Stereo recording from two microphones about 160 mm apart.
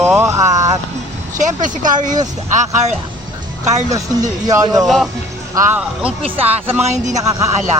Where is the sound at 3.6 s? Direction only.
45° right (ahead or behind).